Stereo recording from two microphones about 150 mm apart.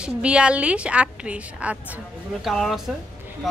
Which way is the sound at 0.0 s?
5° right (ahead or behind).